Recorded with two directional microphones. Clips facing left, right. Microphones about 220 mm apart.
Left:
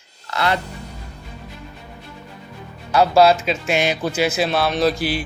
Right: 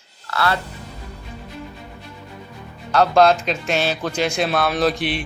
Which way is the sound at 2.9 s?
10° left (ahead or behind).